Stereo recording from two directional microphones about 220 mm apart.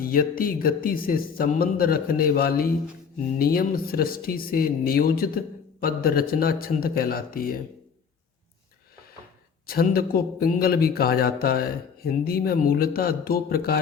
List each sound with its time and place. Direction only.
0.0 s speech: 40° left (ahead or behind)
9.6 s speech: 40° left (ahead or behind)